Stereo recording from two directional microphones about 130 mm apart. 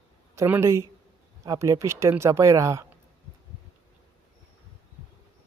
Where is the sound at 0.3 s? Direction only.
20° right (ahead or behind).